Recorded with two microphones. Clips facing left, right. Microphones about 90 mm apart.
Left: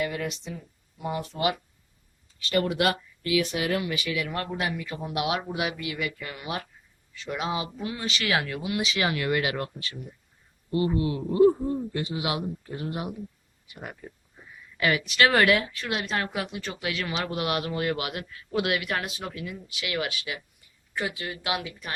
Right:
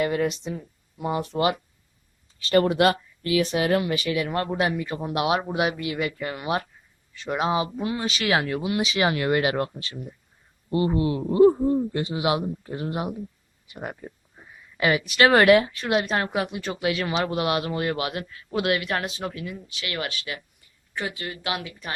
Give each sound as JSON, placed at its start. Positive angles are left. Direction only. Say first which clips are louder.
{"t": 0.0, "sound": "speech", "louder": "right 6 dB", "side_deg": -45}
{"t": 2.4, "sound": "speech", "louder": "right 5 dB", "side_deg": -35}
{"t": 14.8, "sound": "speech", "louder": "right 3 dB", "side_deg": -25}
{"t": 15.2, "sound": "speech", "louder": "right 5 dB", "side_deg": -40}
{"t": 17.2, "sound": "a man's voice", "louder": "right 4 dB", "side_deg": -15}
{"t": 17.9, "sound": "speech", "louder": "right 4 dB", "side_deg": -35}
{"t": 18.5, "sound": "speech", "louder": "right 2 dB", "side_deg": 5}